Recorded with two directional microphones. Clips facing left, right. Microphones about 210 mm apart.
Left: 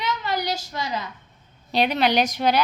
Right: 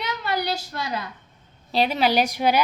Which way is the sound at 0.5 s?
55° right (ahead or behind).